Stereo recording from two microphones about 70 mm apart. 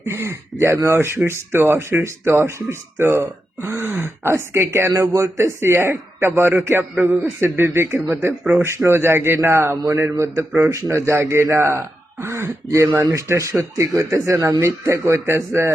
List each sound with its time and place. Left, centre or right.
0.0 s speech: right